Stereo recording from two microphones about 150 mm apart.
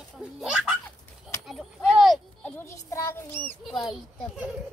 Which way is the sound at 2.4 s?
15° left (ahead or behind).